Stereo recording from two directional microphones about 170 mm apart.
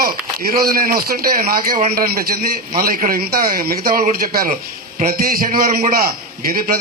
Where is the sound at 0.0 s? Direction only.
60° right (ahead or behind).